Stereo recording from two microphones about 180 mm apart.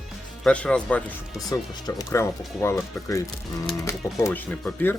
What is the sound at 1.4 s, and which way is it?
Speech, 20° left (ahead or behind).